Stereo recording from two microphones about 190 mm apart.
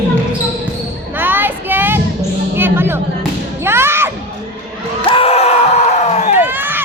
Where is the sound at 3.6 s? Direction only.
15° right (ahead or behind).